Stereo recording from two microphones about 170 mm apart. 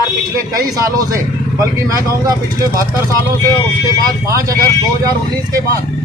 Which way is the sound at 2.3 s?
20° right (ahead or behind).